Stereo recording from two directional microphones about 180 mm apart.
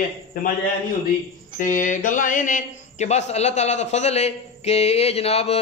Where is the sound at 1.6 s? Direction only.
45° left (ahead or behind).